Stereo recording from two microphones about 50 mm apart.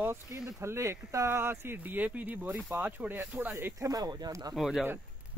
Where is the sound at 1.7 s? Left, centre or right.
Right.